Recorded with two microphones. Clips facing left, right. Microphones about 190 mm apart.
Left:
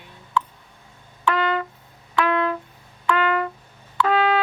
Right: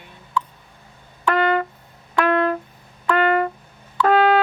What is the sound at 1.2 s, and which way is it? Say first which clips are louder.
Music: right 3 dB; 55° right (ahead or behind).